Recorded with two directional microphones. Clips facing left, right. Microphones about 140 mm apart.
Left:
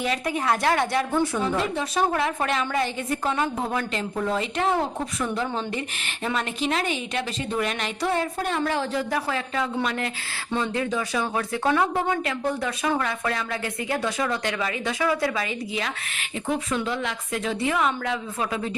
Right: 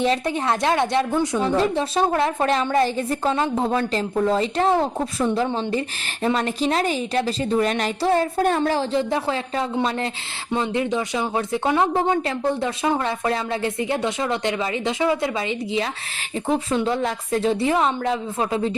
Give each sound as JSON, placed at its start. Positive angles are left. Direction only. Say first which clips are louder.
{"t": 0.0, "sound": "speech", "louder": "right 4 dB", "side_deg": -30}
{"t": 1.4, "sound": "a woman's voice", "louder": "right 5 dB", "side_deg": -30}
{"t": 10.5, "sound": "a woman's voice", "louder": "right 3 dB", "side_deg": -20}